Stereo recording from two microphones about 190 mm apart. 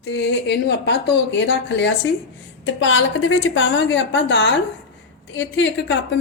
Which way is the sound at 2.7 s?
85° left.